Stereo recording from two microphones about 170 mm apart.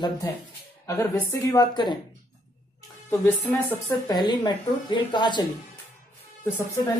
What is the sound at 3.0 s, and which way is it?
A woman's voice, 15° left (ahead or behind).